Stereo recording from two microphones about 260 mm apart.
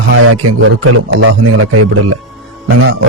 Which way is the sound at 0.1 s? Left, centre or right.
Right.